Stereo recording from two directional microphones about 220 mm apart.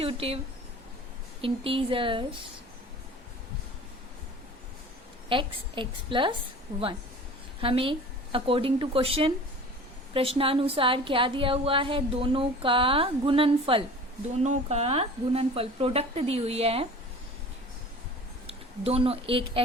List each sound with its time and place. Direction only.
0.0 s speech: 25° right (ahead or behind)
1.4 s a woman's voice: 25° right (ahead or behind)
5.3 s a woman's voice: 20° right (ahead or behind)
7.6 s a woman's voice: 25° right (ahead or behind)
18.4 s a woman's voice: 25° right (ahead or behind)